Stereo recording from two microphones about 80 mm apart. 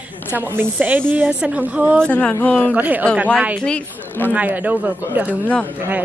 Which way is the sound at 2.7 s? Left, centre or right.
Centre.